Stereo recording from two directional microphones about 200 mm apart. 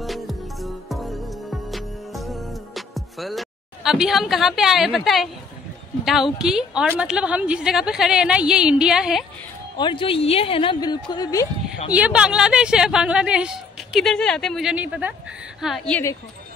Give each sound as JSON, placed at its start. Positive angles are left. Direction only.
{"t": 0.0, "sound": "music", "side_deg": 0}
{"t": 6.0, "sound": "speech", "side_deg": 0}
{"t": 9.8, "sound": "a woman's voice", "side_deg": 25}
{"t": 11.9, "sound": "speech", "side_deg": -5}